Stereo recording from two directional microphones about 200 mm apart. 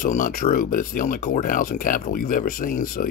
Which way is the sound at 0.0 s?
45° left (ahead or behind).